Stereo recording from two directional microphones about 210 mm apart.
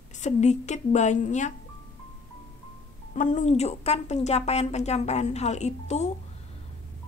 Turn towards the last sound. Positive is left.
turn(degrees=30)  # may be behind; listen again after turning